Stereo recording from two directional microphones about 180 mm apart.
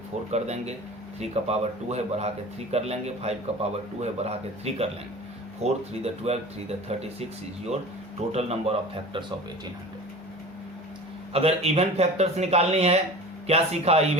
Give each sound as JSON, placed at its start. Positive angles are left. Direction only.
{"t": 0.3, "sound": "a man's voice", "side_deg": -35}
{"t": 8.3, "sound": "a man's voice", "side_deg": -35}
{"t": 11.3, "sound": "a man's voice", "side_deg": -35}